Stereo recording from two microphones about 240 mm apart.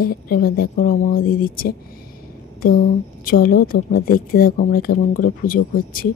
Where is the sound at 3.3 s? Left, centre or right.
Left.